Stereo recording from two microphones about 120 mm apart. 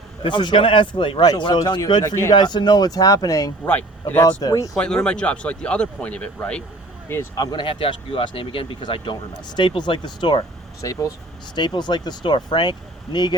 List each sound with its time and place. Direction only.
0.2 s a man's voice: 40° left (ahead or behind)
3.7 s speech: 15° left (ahead or behind)
4.4 s speech: 30° left (ahead or behind)
4.7 s speech: 5° left (ahead or behind)
7.3 s speech: 35° left (ahead or behind)